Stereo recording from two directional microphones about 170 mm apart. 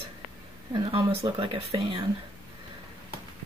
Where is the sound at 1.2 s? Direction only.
30° right (ahead or behind).